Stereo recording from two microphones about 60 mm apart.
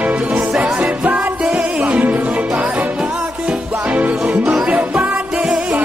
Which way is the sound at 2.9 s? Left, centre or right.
Centre.